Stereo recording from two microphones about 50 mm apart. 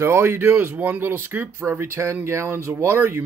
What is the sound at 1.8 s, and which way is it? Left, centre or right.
Speech, right.